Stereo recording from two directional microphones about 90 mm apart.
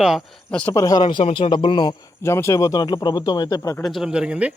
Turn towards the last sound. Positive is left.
turn(degrees=-10)  # may be behind; listen again after turning